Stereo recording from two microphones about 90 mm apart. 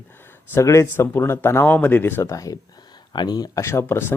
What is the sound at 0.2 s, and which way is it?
A man's voice, 25° left (ahead or behind).